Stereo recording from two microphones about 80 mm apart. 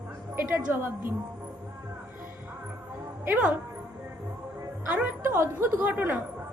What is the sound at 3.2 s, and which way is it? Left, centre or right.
Speech, right.